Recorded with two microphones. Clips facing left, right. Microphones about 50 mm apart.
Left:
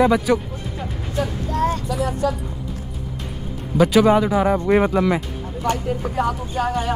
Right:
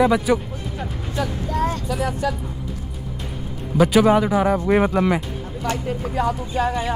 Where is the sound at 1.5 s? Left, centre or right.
Left.